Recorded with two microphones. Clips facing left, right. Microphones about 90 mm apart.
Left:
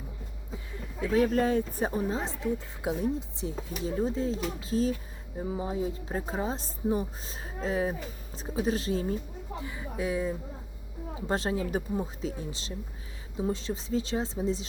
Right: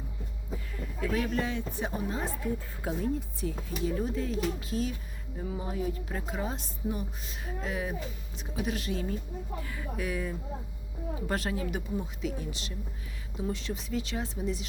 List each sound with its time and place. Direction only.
1.0 s speech: 35° left (ahead or behind)
2.0 s speech: 25° left (ahead or behind)
9.6 s speech: 20° left (ahead or behind)